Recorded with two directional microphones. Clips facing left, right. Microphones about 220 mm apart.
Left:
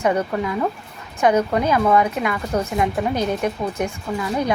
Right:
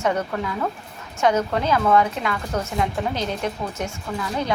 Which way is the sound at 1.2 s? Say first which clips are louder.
Left 3 dB; 15° left (ahead or behind).